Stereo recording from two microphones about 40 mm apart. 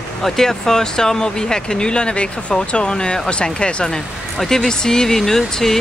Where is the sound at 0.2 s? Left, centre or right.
Centre.